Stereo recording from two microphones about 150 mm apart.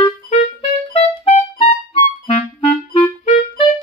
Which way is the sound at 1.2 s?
50° left (ahead or behind).